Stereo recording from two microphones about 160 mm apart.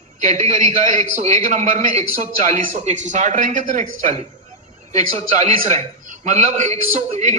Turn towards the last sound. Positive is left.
turn(degrees=-50)  # may be behind; listen again after turning